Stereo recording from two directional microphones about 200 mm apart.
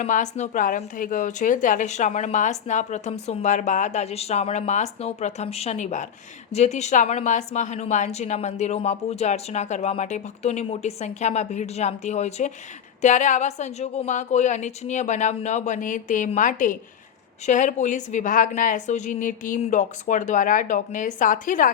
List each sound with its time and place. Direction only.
0.0 s a woman's voice: 35° left (ahead or behind)